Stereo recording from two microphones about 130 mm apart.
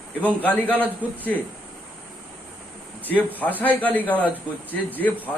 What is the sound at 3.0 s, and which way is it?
Speech, 15° left (ahead or behind).